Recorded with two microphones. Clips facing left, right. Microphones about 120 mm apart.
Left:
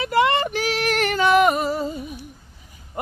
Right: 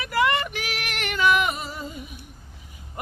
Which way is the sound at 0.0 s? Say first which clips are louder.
Left 4 dB; 25° left (ahead or behind).